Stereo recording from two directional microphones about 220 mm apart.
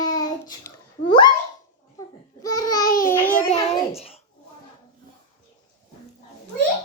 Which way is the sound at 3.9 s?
25° left (ahead or behind).